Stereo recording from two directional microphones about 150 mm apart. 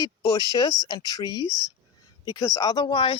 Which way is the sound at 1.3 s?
25° right (ahead or behind).